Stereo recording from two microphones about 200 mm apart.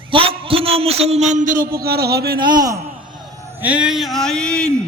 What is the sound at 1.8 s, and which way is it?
Speech, 50° right (ahead or behind).